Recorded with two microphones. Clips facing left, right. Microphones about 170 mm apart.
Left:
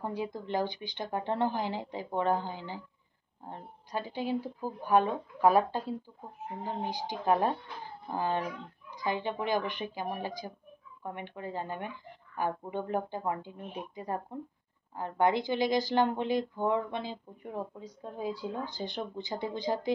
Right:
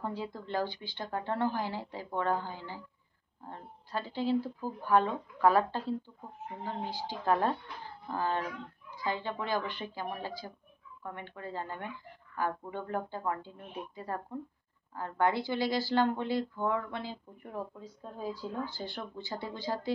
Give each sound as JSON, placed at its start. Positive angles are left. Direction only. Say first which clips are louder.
{"t": 0.0, "sound": "a woman's voice", "louder": "left 2 dB", "side_deg": 15}